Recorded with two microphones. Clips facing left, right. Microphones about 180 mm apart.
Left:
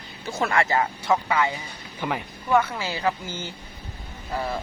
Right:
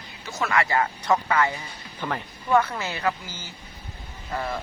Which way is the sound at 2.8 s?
15° left (ahead or behind).